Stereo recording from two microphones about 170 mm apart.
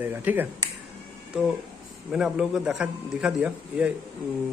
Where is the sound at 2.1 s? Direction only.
5° right (ahead or behind).